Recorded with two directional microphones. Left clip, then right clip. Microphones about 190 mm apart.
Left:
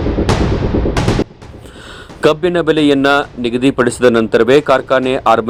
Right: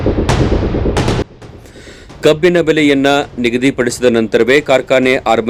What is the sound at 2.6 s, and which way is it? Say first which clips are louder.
Speech: even; 30° right (ahead or behind).